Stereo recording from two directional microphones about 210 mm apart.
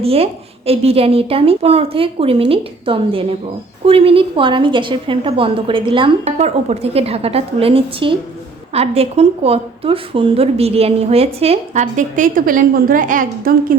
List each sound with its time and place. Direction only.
0.0 s a woman's voice: 30° right (ahead or behind); by 13.7 s 45° right (ahead or behind)